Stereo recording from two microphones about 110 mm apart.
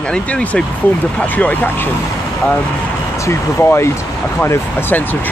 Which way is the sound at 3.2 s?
25° left (ahead or behind).